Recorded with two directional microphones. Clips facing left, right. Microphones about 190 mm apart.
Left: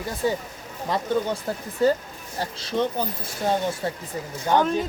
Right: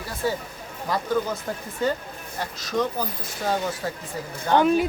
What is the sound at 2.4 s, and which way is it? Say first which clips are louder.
Speech: even; 25° left (ahead or behind).